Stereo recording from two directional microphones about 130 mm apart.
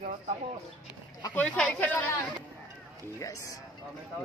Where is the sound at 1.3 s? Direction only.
10° left (ahead or behind).